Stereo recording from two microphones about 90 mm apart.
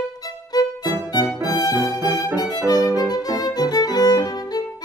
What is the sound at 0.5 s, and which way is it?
Violin, 45° left (ahead or behind).